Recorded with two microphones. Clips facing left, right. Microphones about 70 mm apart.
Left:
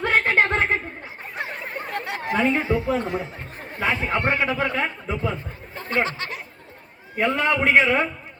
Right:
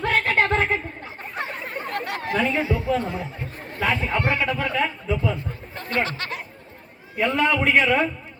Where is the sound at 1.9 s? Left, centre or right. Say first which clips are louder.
Even; centre.